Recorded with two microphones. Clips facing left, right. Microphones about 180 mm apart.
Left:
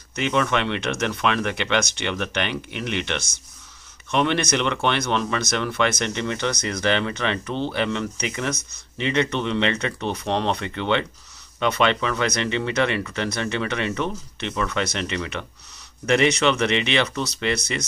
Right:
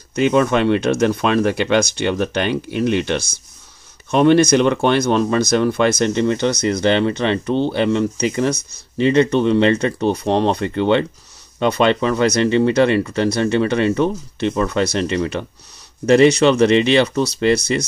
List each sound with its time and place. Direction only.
0.1 s speech: 35° right (ahead or behind)